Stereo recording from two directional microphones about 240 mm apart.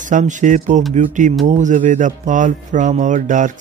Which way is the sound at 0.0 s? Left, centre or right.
Right.